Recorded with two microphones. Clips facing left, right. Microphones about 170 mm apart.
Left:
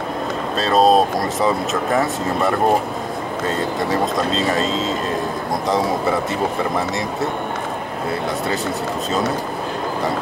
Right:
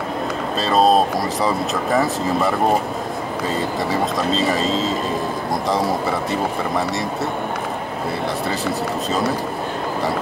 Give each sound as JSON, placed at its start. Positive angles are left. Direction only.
{"t": 0.6, "sound": "speech", "side_deg": 0}